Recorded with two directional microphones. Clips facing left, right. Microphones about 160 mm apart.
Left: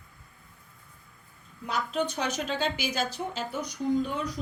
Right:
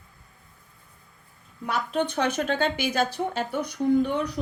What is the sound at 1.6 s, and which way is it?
A woman's voice, 60° right (ahead or behind).